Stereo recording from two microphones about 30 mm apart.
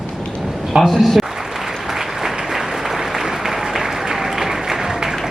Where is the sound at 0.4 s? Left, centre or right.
Centre.